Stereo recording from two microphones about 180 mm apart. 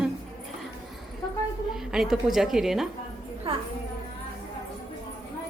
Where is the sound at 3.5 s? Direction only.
35° right (ahead or behind).